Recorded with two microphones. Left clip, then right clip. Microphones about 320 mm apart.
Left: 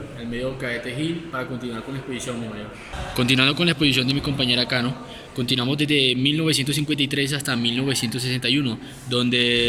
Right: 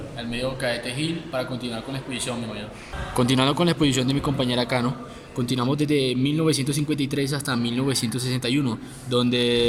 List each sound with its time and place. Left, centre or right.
0.7 s a man's voice: centre
3.2 s a man's voice: centre